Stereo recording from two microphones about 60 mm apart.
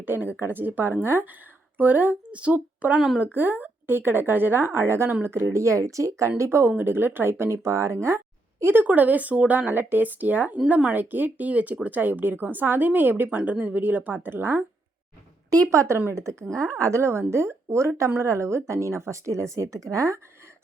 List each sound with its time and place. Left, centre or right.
0.0 s a woman's voice: right
8.0 s a sound: right
8.9 s speech: right
15.4 s a woman's voice: right